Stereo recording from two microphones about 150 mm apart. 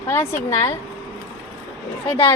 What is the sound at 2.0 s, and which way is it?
Speech, 35° left (ahead or behind).